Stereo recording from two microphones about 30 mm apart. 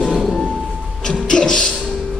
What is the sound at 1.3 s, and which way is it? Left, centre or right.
Speech, left.